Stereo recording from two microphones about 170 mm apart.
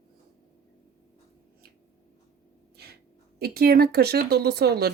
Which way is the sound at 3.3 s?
65° right (ahead or behind).